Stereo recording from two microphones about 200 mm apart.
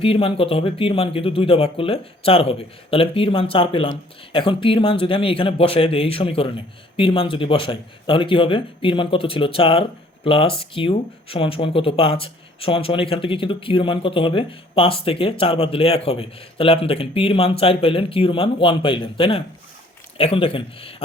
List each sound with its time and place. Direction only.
0.0 s speech: 25° left (ahead or behind)